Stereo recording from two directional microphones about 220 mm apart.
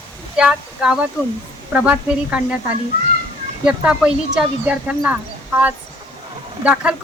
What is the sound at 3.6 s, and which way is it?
Speech, 5° right (ahead or behind).